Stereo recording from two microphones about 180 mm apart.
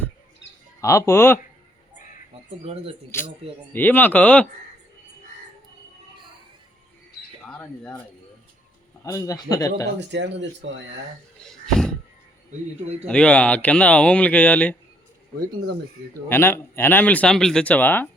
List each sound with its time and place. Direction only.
0.8 s speech: 15° left (ahead or behind)
2.6 s speech: 35° right (ahead or behind)
3.1 s speech: 15° left (ahead or behind)
7.4 s speech: 5° left (ahead or behind)
9.0 s a man's voice: 20° left (ahead or behind)
10.0 s speech: 75° right (ahead or behind)
11.3 s a sound: 5° left (ahead or behind)
13.1 s speech: 5° left (ahead or behind)
16.3 s speech: 15° left (ahead or behind)